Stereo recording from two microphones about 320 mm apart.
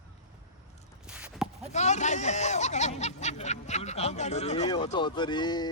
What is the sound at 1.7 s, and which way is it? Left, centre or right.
Speech, left.